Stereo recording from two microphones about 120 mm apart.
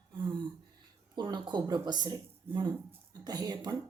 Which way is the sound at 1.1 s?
40° right (ahead or behind).